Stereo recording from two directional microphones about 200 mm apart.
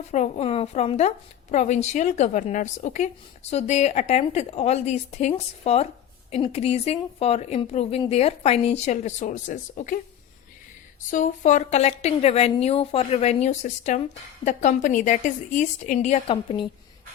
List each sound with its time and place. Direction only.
0.1 s a woman's voice: 35° left (ahead or behind)
11.1 s a woman's voice: 40° left (ahead or behind)